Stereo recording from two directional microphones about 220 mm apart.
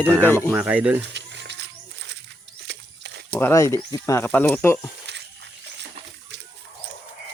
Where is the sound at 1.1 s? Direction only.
50° right (ahead or behind).